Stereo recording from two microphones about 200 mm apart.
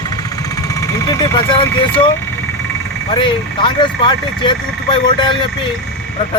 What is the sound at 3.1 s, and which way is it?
Speech, 25° left (ahead or behind).